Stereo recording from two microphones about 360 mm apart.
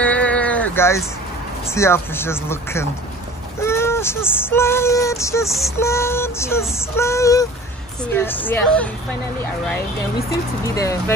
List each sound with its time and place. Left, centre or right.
0.0 s a sound: centre
1.8 s a woman's voice: centre
10.7 s speech: centre